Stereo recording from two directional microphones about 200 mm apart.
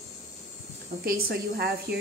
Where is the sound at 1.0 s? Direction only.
50° right (ahead or behind).